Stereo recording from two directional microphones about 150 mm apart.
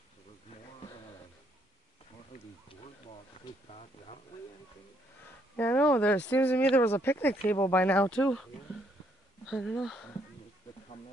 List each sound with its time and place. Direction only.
5.6 s speech: 10° left (ahead or behind)
9.5 s speech: centre (ahead or behind)